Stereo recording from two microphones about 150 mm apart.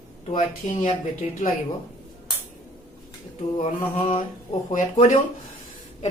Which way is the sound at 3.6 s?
40° left (ahead or behind).